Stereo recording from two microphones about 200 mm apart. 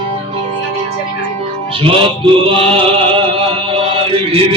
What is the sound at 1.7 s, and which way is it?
Music, 25° right (ahead or behind).